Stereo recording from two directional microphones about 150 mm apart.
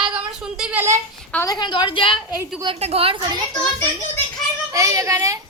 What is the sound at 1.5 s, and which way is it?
Speech, 30° left (ahead or behind).